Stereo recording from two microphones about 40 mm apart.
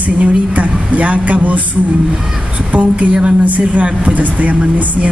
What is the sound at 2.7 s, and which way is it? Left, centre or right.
Speech, right.